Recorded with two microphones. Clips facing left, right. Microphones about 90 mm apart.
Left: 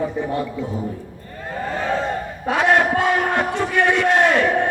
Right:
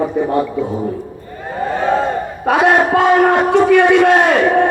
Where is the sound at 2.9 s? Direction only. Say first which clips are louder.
Right 8 dB; 75° right (ahead or behind).